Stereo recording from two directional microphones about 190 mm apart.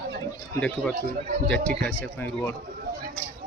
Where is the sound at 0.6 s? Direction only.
5° left (ahead or behind).